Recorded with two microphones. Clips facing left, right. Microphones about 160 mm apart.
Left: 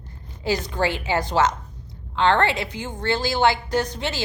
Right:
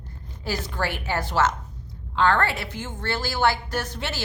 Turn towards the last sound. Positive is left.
turn(degrees=15)  # may be behind; listen again after turning